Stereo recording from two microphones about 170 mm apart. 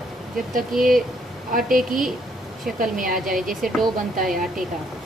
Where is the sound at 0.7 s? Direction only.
Centre (ahead or behind).